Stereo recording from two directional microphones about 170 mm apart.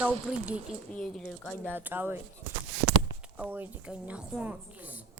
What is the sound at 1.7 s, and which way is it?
Speech, 10° right (ahead or behind).